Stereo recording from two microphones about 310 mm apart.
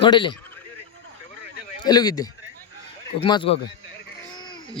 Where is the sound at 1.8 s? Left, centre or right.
Centre.